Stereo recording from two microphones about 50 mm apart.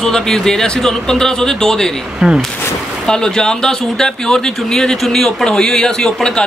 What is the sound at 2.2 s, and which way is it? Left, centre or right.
Speech, centre.